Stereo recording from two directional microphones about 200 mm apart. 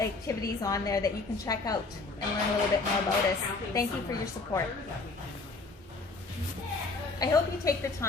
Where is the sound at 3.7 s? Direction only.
15° left (ahead or behind).